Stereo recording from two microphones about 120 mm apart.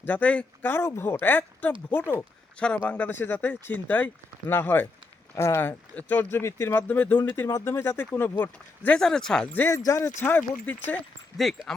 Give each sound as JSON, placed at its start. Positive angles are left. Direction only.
{"t": 0.0, "sound": "speech", "side_deg": 15}
{"t": 9.6, "sound": "speech", "side_deg": 25}
{"t": 11.3, "sound": "speech", "side_deg": 0}